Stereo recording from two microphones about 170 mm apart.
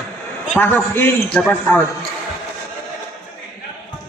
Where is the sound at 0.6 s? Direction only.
10° left (ahead or behind).